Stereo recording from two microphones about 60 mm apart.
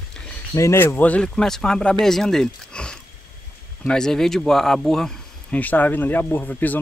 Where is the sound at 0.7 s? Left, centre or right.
Left.